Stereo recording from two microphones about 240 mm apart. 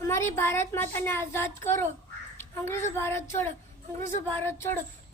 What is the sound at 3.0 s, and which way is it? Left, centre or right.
A woman's voice, centre.